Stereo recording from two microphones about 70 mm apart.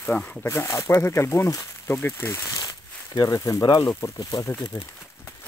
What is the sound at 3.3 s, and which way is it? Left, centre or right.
Speech, left.